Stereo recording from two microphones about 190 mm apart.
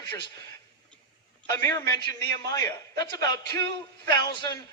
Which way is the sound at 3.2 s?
60° right (ahead or behind).